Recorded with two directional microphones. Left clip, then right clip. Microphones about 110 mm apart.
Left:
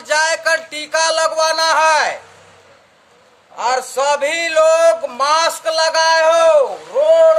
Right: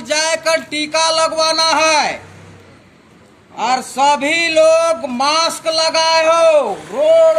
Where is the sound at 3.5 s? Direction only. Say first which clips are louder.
Right 1 dB; 50° left (ahead or behind).